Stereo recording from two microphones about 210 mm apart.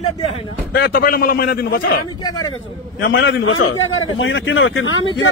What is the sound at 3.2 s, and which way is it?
A man's voice, 65° left (ahead or behind).